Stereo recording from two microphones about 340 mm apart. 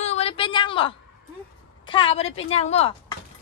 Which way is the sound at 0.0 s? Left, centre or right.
Centre.